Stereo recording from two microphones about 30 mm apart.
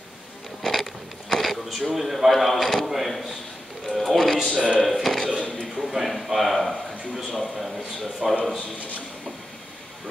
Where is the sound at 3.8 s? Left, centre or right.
Centre.